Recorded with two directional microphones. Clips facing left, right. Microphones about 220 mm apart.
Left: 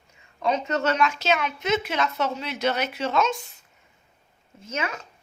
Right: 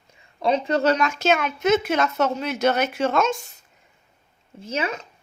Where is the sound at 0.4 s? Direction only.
30° right (ahead or behind); by 3.3 s 50° right (ahead or behind).